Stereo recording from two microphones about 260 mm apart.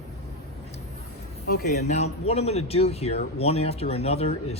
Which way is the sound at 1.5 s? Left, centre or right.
Left.